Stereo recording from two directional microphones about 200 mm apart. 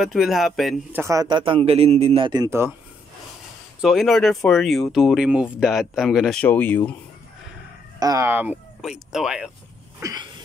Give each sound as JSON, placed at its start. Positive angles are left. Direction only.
{"t": 0.0, "sound": "speech", "side_deg": 0}
{"t": 1.0, "sound": "a man's voice", "side_deg": -20}
{"t": 3.8, "sound": "speech", "side_deg": 0}
{"t": 8.0, "sound": "speech", "side_deg": -15}
{"t": 9.9, "sound": "sneeze", "side_deg": -15}